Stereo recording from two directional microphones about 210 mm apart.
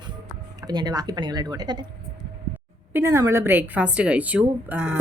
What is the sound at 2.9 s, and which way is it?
A woman's voice, 15° right (ahead or behind).